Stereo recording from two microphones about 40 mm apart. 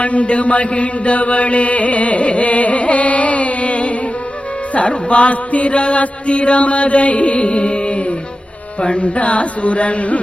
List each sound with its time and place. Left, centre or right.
0.0 s mantra: left
4.7 s music: left